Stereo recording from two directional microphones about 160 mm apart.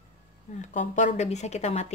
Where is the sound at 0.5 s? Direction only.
50° left (ahead or behind).